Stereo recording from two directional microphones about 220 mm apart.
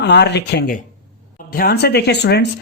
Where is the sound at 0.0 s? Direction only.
50° left (ahead or behind).